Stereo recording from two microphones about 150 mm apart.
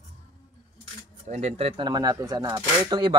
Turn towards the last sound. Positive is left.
turn(degrees=-30)  # may be behind; listen again after turning